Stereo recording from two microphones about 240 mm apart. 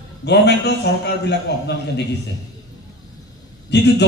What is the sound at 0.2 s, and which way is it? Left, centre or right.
Speech, left.